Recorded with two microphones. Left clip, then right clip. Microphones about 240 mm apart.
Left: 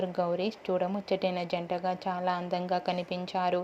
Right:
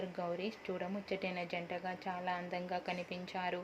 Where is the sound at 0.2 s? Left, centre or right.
Left.